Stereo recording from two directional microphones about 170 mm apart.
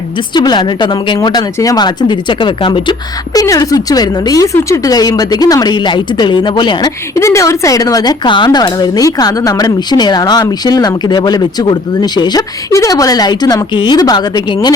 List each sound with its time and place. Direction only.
0.3 s speech: 25° left (ahead or behind)